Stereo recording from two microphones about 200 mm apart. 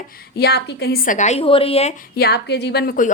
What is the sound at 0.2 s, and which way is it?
A woman's voice, 55° left (ahead or behind).